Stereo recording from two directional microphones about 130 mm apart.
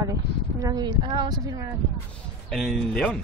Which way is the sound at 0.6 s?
25° right (ahead or behind).